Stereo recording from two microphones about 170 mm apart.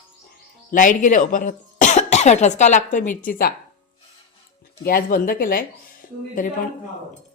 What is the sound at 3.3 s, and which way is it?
Speech, 60° left (ahead or behind).